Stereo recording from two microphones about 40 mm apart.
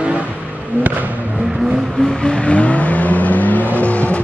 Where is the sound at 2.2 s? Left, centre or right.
Left.